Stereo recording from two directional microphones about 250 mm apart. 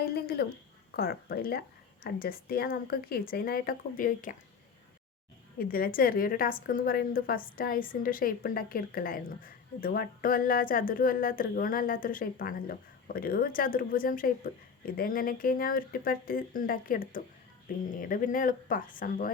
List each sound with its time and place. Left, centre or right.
0.0 s a sound: left
0.9 s a woman's voice: left
5.5 s a woman's voice: left